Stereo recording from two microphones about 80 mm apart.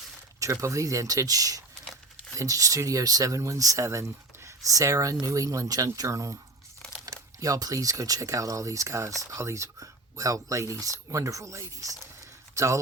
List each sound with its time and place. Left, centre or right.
0.3 s speech: right